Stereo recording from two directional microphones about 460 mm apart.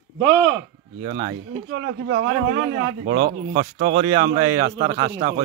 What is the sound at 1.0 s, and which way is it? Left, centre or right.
Speech, centre.